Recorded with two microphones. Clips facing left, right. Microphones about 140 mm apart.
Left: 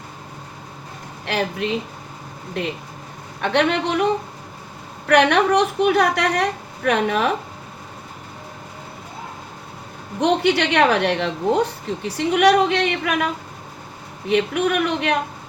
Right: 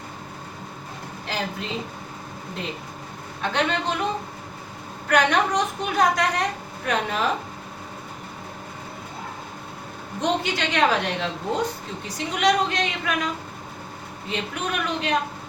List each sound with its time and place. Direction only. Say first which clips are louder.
1.3 s a woman's voice: left 7 dB; 65° left (ahead or behind)
3.4 s a woman's voice: left 5 dB; 65° left (ahead or behind)
5.0 s a woman's voice: left 5 dB; 70° left (ahead or behind)
10.2 s a woman's voice: left 7 dB; 65° left (ahead or behind)